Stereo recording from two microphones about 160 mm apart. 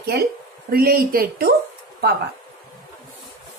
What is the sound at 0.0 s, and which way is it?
Speech, 80° right.